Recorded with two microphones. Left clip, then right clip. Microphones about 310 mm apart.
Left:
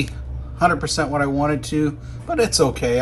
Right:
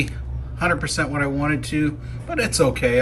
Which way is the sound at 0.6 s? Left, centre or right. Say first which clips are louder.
Left 3 dB; centre.